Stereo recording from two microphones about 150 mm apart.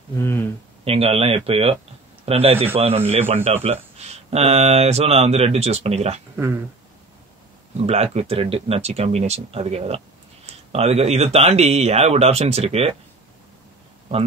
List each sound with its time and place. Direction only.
0.2 s a sound: 15° left (ahead or behind)
0.8 s speech: 40° right (ahead or behind)
6.3 s speech: 15° right (ahead or behind)
7.7 s speech: 45° right (ahead or behind)